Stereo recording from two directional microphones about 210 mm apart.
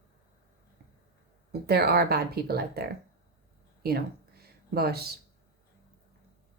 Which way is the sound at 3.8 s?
45° right (ahead or behind).